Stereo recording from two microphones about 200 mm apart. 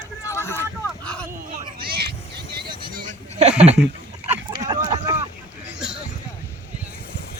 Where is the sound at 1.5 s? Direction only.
40° right (ahead or behind).